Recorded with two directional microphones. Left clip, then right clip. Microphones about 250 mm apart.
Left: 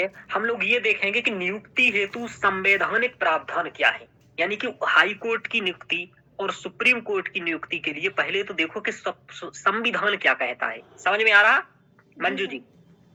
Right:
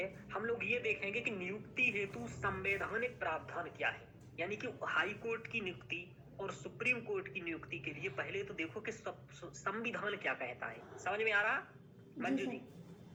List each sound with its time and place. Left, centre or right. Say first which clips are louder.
0.0 s a man's voice: left 16 dB; left